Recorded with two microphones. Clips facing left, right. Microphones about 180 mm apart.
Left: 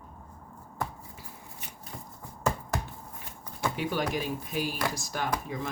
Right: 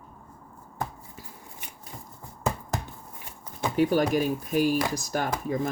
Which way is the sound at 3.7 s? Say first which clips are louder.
Right 10 dB; 45° right (ahead or behind).